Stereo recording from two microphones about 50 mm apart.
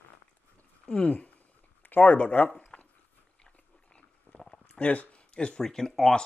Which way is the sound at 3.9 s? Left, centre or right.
Left.